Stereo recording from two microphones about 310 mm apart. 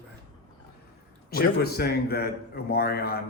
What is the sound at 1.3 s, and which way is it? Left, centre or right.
A man's voice, left.